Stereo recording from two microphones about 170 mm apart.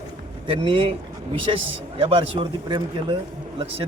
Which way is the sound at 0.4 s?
30° right (ahead or behind).